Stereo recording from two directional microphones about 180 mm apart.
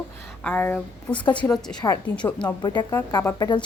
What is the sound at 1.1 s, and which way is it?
A woman's voice, 25° left (ahead or behind).